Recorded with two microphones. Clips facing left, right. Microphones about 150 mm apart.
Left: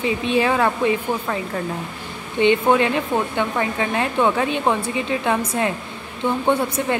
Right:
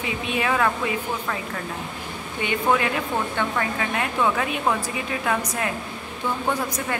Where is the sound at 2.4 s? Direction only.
25° left (ahead or behind).